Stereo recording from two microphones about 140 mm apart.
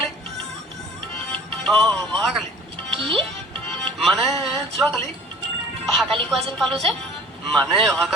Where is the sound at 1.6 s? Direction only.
5° left (ahead or behind).